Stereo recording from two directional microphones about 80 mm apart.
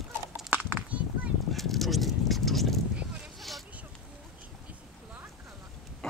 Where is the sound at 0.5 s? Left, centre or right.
Right.